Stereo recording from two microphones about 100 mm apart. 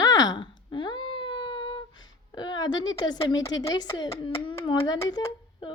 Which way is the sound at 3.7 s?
45° left (ahead or behind).